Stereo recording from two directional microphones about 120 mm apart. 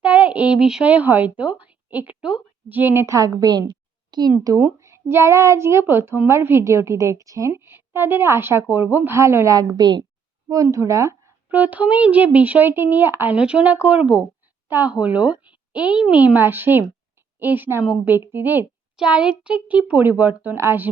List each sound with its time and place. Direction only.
0.0 s speech: 10° right (ahead or behind)
11.4 s a woman's voice: 15° right (ahead or behind)